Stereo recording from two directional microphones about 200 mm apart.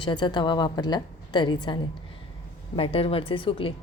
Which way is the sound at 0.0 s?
25° left (ahead or behind).